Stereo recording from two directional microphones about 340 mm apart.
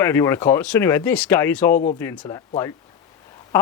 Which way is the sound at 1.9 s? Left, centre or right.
Centre.